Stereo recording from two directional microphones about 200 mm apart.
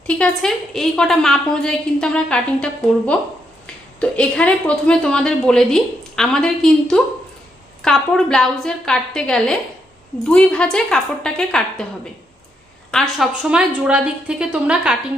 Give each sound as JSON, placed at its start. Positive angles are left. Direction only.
{"t": 0.2, "sound": "a woman's voice", "side_deg": 0}
{"t": 4.0, "sound": "a woman's voice", "side_deg": 5}
{"t": 12.9, "sound": "a woman's voice", "side_deg": 0}